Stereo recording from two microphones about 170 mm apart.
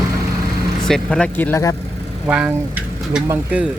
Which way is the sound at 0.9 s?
5° left (ahead or behind).